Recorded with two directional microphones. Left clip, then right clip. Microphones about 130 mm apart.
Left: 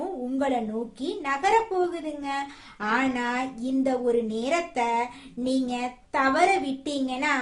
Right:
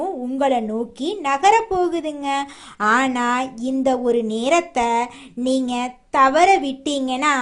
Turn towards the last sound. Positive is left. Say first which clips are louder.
# right 7 dB
turn(degrees=-70)  # may be behind; listen again after turning